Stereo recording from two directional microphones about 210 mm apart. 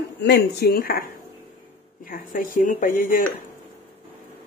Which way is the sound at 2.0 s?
40° left (ahead or behind).